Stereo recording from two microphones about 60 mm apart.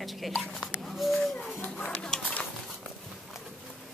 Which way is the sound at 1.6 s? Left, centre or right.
Left.